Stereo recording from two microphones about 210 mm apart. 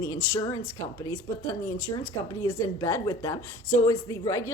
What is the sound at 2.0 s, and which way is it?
A woman's voice, 15° left (ahead or behind).